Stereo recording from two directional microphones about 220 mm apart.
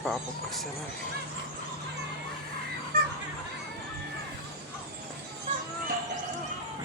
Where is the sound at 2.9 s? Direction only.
45° right (ahead or behind).